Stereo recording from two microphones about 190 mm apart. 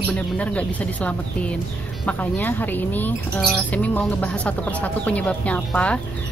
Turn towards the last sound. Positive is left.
turn(degrees=5)  # may be behind; listen again after turning